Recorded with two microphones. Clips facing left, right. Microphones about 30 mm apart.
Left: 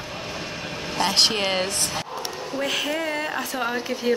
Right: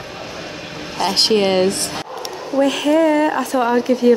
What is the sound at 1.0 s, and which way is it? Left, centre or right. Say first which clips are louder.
Speech: right 3 dB; right.